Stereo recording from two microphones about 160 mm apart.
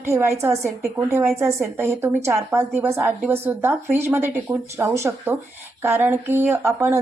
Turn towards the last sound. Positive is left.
turn(degrees=-15)  # may be behind; listen again after turning